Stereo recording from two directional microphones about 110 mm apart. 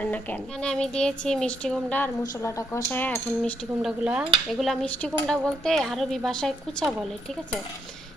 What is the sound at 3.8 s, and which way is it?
Cutlery, 5° right (ahead or behind).